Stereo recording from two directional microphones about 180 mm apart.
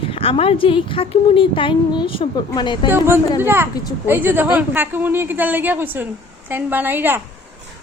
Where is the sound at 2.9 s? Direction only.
15° right (ahead or behind).